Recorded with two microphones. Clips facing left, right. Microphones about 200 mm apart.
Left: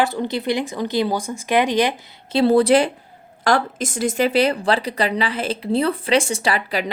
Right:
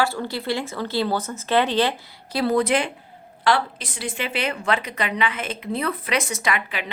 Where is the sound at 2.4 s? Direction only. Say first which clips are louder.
Left 6 dB; 30° left (ahead or behind).